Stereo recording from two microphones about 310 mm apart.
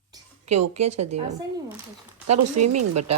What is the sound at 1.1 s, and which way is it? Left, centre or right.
Speech, right.